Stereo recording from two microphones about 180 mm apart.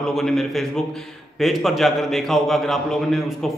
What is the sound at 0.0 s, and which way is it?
A man's voice, centre (ahead or behind).